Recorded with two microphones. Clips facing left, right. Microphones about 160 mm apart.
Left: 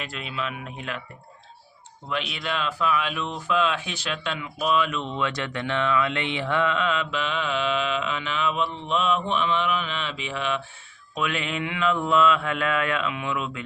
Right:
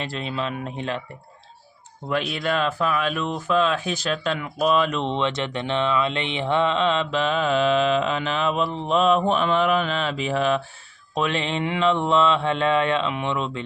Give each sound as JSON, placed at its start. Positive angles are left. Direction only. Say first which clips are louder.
{"t": 0.0, "sound": "speech", "louder": "right 4 dB", "side_deg": -35}
{"t": 2.0, "sound": "speech", "louder": "right 6 dB", "side_deg": -45}
{"t": 11.1, "sound": "mantra", "louder": "right 4 dB", "side_deg": -35}